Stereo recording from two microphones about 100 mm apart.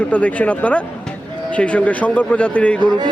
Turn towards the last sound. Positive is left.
turn(degrees=-50)  # may be behind; listen again after turning